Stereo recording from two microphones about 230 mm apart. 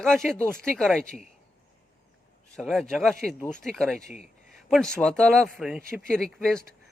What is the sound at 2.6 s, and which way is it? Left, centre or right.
Speech, centre.